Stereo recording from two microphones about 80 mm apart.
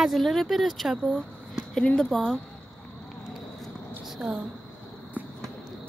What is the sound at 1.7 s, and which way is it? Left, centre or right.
Speech, centre.